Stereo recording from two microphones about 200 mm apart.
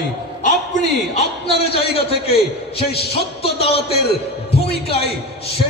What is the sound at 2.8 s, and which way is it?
Speech, 50° left (ahead or behind).